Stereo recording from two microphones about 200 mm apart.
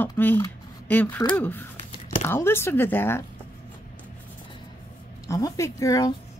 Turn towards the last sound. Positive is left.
turn(degrees=15)  # may be behind; listen again after turning